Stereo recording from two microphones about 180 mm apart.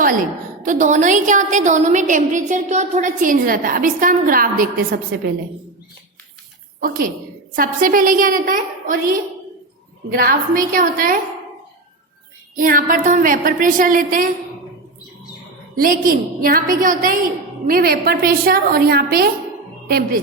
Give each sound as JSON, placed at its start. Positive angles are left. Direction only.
{"t": 0.6, "sound": "a woman's voice", "side_deg": -45}
{"t": 6.7, "sound": "a woman's voice", "side_deg": -50}
{"t": 12.5, "sound": "a woman's voice", "side_deg": -50}
{"t": 15.7, "sound": "a woman's voice", "side_deg": -50}